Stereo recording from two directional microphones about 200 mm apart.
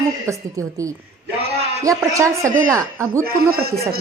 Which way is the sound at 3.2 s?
50° right (ahead or behind).